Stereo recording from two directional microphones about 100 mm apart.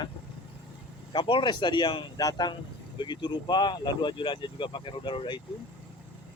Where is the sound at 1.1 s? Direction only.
50° left (ahead or behind).